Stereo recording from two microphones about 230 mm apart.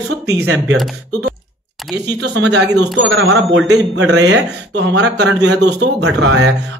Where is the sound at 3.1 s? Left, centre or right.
Right.